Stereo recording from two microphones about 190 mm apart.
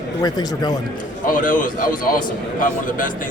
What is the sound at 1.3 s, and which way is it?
A man's voice, 45° left (ahead or behind).